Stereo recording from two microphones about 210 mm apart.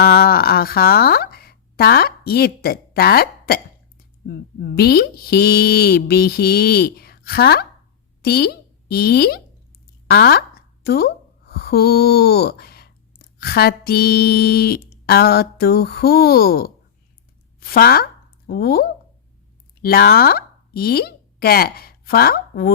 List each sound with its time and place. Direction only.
0.0 s a woman's voice: 50° left (ahead or behind)